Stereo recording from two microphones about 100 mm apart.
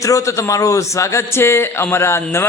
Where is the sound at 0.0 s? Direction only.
30° left (ahead or behind).